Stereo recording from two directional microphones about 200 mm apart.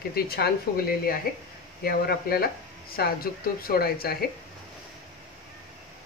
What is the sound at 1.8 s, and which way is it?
Speech, 50° left (ahead or behind).